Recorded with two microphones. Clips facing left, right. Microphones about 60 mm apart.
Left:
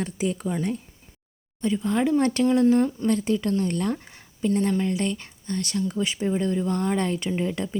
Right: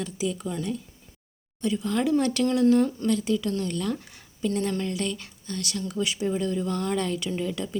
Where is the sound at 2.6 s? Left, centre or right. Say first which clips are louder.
Left 1 dB; centre.